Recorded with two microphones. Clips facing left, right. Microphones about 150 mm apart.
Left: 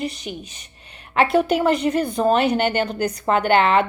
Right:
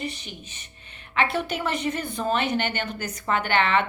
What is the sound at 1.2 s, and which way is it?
A woman's voice, 40° left (ahead or behind).